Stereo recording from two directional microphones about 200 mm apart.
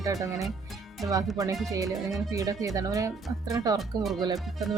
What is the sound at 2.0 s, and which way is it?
Speech, centre (ahead or behind).